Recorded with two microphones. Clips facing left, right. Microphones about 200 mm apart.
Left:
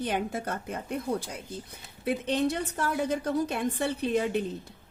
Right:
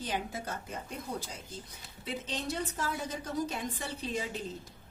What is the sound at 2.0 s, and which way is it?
A woman's voice, 60° left (ahead or behind).